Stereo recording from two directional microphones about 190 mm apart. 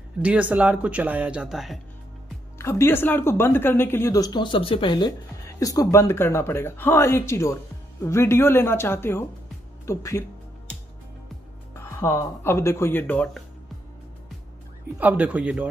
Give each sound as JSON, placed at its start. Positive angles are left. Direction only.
{"t": 0.2, "sound": "speech", "side_deg": -5}
{"t": 2.6, "sound": "speech", "side_deg": 15}
{"t": 11.7, "sound": "speech", "side_deg": 15}
{"t": 15.0, "sound": "speech", "side_deg": -10}